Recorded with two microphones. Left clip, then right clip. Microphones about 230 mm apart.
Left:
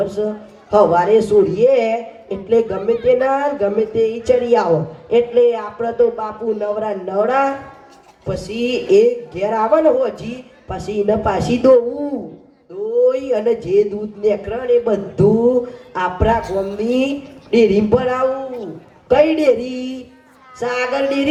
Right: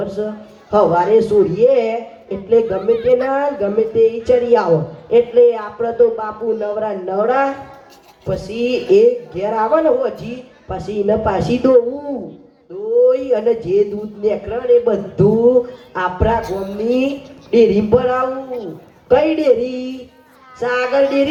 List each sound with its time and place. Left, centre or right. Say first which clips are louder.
0.0 s a man's voice: left 2 dB; left
13.1 s a man's voice: right 2 dB; left
16.4 s music: left 2 dB; right
16.8 s a man's voice: right 1 dB; left